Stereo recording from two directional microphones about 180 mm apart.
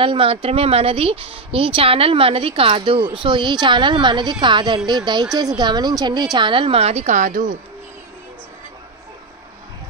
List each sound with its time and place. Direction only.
0.0 s a woman's voice: 30° right (ahead or behind)